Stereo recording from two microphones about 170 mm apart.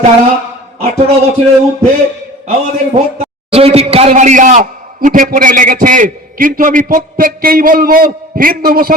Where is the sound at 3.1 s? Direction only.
35° right (ahead or behind).